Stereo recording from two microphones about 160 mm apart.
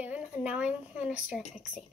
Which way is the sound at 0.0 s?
5° right (ahead or behind).